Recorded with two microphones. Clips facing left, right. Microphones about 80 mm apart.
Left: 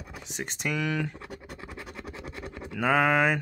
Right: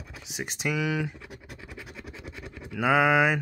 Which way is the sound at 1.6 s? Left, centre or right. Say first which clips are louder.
Left 2 dB; left.